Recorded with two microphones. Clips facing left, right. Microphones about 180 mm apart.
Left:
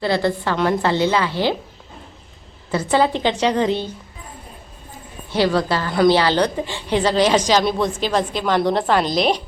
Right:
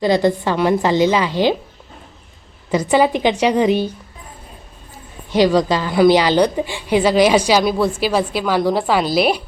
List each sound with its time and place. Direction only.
0.0 s a woman's voice: 15° right (ahead or behind)
2.7 s a woman's voice: 15° right (ahead or behind)
5.3 s a woman's voice: 15° right (ahead or behind)